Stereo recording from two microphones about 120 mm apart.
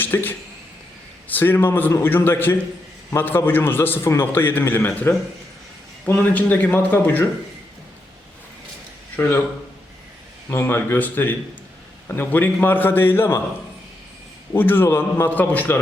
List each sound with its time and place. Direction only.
0.0 s a man's voice: 15° left (ahead or behind)
9.1 s a man's voice: 15° left (ahead or behind)
10.5 s a man's voice: 20° left (ahead or behind)
14.5 s a man's voice: 20° left (ahead or behind)